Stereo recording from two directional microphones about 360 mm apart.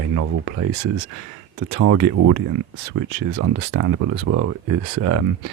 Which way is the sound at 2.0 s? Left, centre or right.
Right.